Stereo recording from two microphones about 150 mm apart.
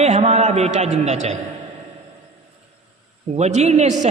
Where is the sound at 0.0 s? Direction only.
50° right (ahead or behind).